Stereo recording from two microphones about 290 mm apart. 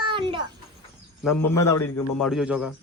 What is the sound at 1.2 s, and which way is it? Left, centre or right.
A man's voice, centre.